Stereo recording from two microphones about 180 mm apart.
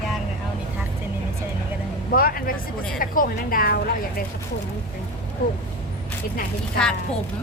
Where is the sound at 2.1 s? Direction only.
55° left (ahead or behind).